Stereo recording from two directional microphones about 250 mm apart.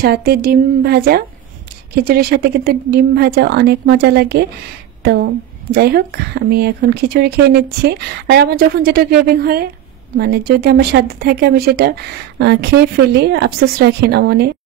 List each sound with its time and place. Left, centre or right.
0.0 s a woman's voice: right